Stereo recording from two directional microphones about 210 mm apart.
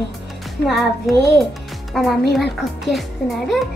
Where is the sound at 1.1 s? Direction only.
Centre (ahead or behind).